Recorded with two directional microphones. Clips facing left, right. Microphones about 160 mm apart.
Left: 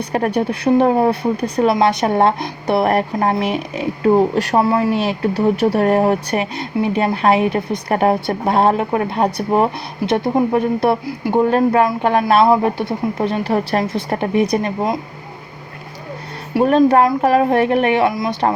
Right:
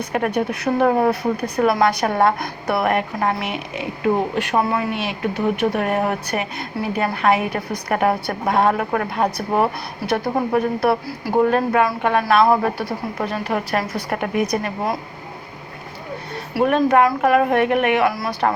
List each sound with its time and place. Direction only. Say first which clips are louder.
0.1 s a woman's voice: left 3 dB; 35° left (ahead or behind)
16.6 s a woman's voice: left 4 dB; 30° left (ahead or behind)